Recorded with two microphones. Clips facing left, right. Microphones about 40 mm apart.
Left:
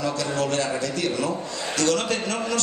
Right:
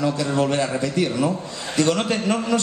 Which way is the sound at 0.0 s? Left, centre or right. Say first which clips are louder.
Right 4 dB; centre.